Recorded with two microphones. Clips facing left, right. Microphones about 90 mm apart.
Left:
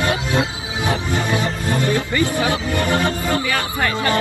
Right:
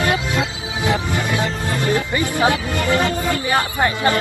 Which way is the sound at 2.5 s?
25° left (ahead or behind).